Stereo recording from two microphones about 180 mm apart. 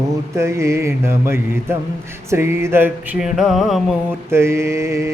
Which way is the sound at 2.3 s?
15° right (ahead or behind).